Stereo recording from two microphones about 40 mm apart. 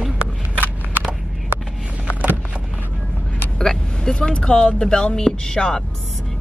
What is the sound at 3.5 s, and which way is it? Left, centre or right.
Speech, centre.